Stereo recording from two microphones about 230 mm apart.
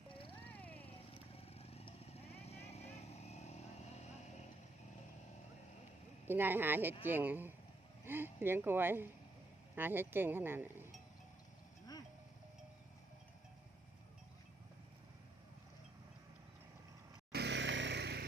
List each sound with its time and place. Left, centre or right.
0.1 s cat: left
0.4 s a sound: centre
1.3 s vehicle: left
6.2 s speech: centre
17.3 s vehicle: right